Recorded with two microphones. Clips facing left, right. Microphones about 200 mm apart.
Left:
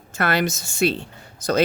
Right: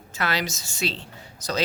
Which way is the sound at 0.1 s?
55° left (ahead or behind).